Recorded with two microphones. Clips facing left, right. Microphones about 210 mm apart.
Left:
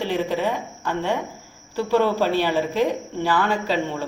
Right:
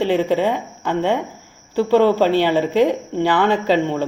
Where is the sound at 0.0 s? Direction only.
20° right (ahead or behind).